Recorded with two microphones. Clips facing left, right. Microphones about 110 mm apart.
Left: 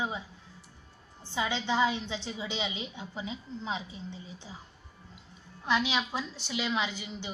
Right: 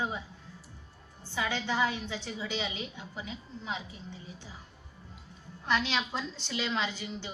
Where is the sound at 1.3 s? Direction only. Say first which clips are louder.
Left 2 dB; 20° left (ahead or behind).